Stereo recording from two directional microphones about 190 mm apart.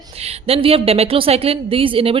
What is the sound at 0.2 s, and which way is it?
A woman's voice, 30° right (ahead or behind).